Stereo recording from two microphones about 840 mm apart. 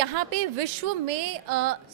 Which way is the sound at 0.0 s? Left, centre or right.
Right.